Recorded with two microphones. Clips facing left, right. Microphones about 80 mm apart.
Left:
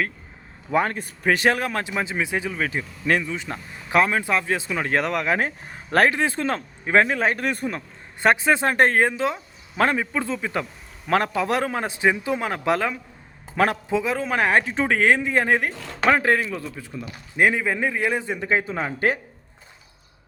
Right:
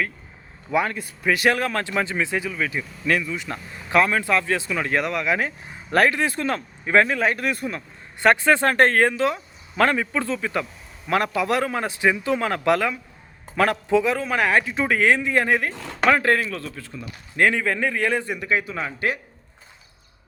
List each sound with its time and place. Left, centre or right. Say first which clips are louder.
0.7 s speech: left 1 dB; left
1.5 s a man's voice: right 1 dB; left
2.5 s speech: even; left
3.3 s speech: even; left
8.2 s a man's voice: right 1 dB; centre
18.3 s speech: left 1 dB; left